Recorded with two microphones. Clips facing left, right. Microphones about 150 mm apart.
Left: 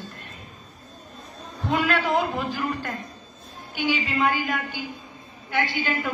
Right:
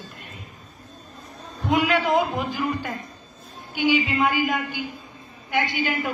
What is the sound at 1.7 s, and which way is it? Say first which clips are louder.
Speech: right 3 dB; 15° right (ahead or behind).